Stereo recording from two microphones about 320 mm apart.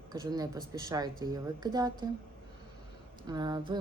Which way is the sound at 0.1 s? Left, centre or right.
Centre.